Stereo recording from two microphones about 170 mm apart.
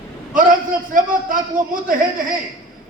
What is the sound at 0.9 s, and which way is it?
A man's voice, 55° right (ahead or behind).